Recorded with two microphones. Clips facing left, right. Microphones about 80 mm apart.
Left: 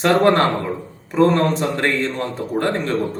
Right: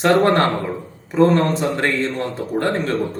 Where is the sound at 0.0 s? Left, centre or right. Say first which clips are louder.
Even; centre.